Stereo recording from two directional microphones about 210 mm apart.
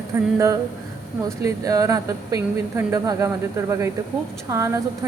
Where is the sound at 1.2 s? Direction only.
15° right (ahead or behind).